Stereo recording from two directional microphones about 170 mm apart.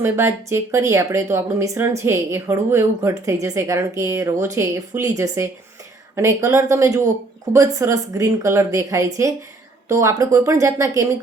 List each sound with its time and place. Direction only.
0.0 s speech: 15° right (ahead or behind)